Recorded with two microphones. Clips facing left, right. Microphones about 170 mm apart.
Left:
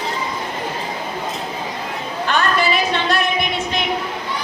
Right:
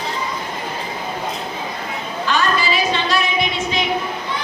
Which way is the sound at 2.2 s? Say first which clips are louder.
Left 1 dB; 55° left (ahead or behind).